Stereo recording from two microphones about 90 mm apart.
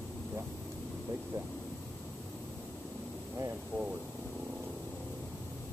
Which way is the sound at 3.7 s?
20° left (ahead or behind).